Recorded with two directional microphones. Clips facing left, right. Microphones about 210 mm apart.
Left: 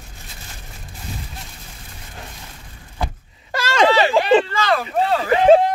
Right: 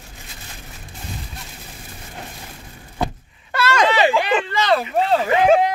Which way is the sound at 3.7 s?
35° left (ahead or behind).